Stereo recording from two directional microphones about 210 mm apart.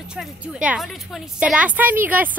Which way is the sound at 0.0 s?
5° right (ahead or behind).